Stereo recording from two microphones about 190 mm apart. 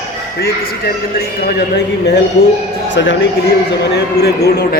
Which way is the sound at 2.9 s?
70° left (ahead or behind).